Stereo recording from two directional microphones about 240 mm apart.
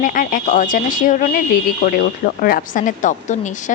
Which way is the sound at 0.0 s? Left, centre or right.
Left.